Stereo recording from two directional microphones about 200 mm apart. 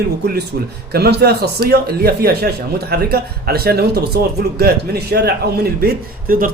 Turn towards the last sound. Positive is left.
turn(degrees=-45)  # may be behind; listen again after turning